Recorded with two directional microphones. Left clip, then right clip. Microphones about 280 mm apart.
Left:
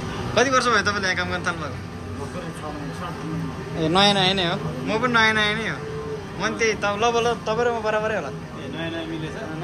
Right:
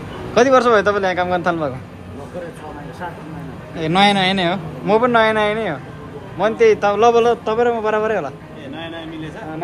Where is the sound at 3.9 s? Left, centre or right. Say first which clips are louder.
Right 4 dB; right.